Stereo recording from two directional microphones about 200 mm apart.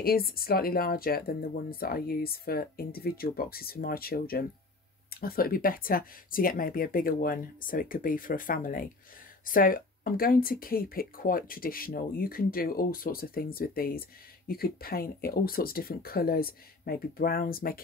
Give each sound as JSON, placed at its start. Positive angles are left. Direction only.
{"t": 0.0, "sound": "speech", "side_deg": 50}